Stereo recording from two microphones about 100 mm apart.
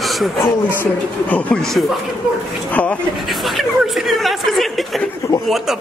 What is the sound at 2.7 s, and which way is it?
Speech, 15° left (ahead or behind).